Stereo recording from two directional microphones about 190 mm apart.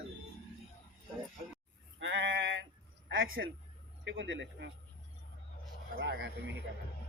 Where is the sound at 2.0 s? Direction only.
75° right (ahead or behind).